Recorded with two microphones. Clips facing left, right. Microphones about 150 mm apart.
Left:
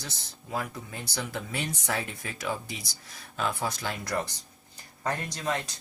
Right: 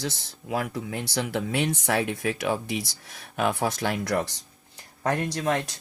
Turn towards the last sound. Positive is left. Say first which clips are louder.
# right 6 dB
turn(degrees=-60)  # may be behind; listen again after turning